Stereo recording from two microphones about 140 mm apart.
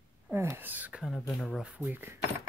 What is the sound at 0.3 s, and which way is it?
Speech, 15° right (ahead or behind).